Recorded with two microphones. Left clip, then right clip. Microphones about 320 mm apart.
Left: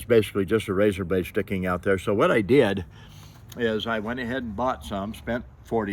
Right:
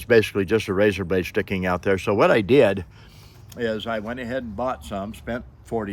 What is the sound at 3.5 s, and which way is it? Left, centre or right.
Speech, centre.